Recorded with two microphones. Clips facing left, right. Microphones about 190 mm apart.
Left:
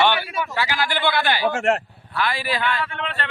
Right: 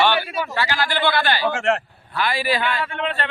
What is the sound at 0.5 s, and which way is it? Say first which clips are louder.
Speech: right 1 dB; 10° left (ahead or behind).